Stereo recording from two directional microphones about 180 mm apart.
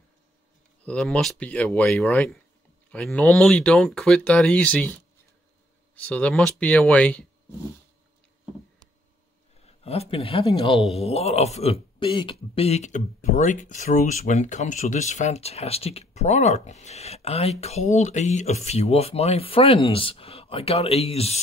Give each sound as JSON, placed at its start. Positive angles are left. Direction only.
{"t": 0.8, "sound": "speech", "side_deg": 5}
{"t": 9.7, "sound": "a man's voice", "side_deg": 35}